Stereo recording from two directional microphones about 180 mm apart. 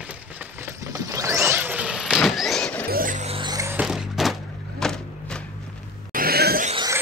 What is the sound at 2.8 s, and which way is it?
Music, 50° right (ahead or behind).